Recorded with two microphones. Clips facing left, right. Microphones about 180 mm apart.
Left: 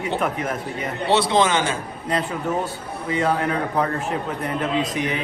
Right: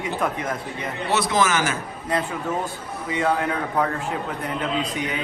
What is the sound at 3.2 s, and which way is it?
Speech, 30° left (ahead or behind).